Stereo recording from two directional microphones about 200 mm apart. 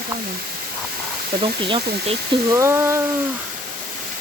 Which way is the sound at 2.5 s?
15° right (ahead or behind).